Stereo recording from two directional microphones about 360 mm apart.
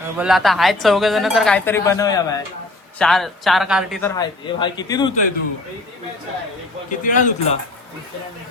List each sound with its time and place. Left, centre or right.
0.2 s speech: centre
7.0 s speech: left